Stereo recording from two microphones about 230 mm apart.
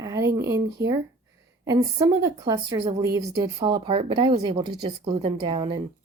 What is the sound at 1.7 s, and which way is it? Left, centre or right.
Speech, centre.